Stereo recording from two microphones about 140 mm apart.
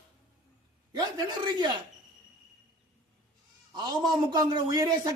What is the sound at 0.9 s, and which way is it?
Speech, 30° right (ahead or behind).